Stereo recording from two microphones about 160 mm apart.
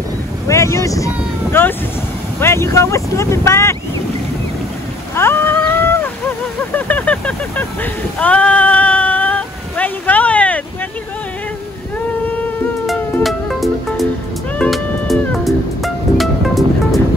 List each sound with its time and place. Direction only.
0.5 s speech: 20° left (ahead or behind)
5.1 s a sound: 15° left (ahead or behind)
12.3 s insect: 10° left (ahead or behind)
12.8 s music: centre (ahead or behind)